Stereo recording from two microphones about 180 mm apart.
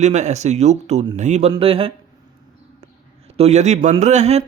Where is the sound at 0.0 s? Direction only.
40° right (ahead or behind).